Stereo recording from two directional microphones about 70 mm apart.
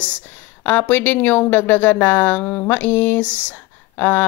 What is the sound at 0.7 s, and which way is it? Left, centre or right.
A woman's voice, left.